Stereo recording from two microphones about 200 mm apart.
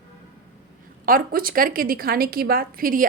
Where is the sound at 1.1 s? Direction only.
45° right (ahead or behind).